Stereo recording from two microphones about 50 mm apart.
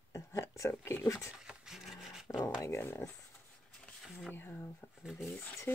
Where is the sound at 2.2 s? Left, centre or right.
Left.